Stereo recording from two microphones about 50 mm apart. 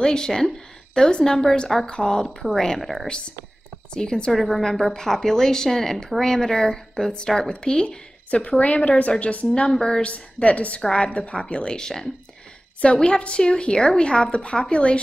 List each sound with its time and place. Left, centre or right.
0.0 s a woman's voice: centre
3.1 s a woman's voice: left
9.5 s a woman's voice: centre
10.0 s a woman's voice: left
10.8 s a woman's voice: centre
11.1 s a woman's voice: left